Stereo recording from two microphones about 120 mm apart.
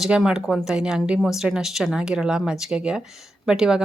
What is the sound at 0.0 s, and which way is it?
Speech, 5° right (ahead or behind).